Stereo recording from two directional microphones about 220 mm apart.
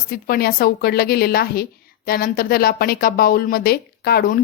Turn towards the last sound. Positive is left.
turn(degrees=40)  # may be behind; listen again after turning